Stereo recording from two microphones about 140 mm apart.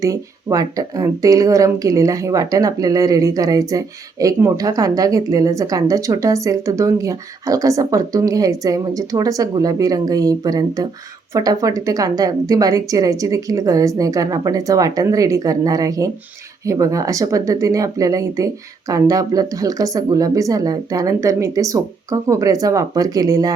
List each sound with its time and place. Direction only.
0.0 s speech: 25° right (ahead or behind)